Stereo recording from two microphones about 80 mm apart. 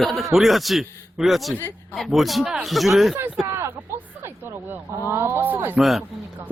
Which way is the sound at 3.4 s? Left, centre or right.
Right.